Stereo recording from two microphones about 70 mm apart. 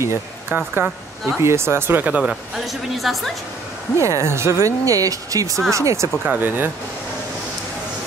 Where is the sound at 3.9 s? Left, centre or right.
Right.